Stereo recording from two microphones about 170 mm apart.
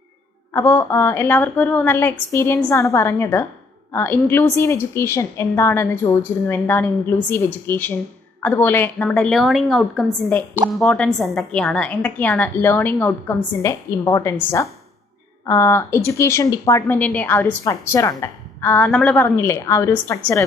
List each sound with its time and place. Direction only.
0.5 s a woman's voice: 15° left (ahead or behind)
15.4 s a woman's voice: 15° left (ahead or behind)